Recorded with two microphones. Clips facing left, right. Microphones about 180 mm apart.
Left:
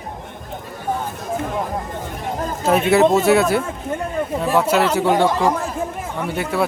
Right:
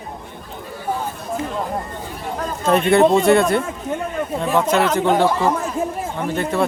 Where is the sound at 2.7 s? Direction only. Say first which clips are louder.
Right 1 dB; 5° left (ahead or behind).